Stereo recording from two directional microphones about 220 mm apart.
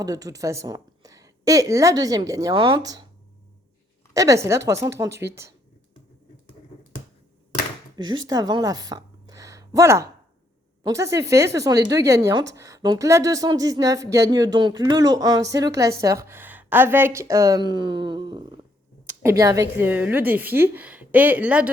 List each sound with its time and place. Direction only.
0.0 s speech: 15° right (ahead or behind)
4.1 s speech: 15° right (ahead or behind)
7.9 s a woman's voice: 20° right (ahead or behind)